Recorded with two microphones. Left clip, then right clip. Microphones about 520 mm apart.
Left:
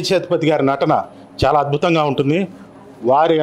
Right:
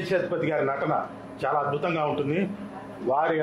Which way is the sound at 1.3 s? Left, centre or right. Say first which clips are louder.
Left 10 dB; left.